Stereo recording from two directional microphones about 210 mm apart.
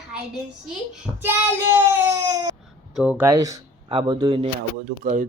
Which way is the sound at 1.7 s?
15° right (ahead or behind).